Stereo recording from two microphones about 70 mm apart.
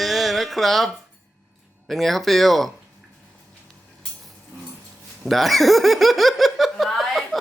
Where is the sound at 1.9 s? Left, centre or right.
Centre.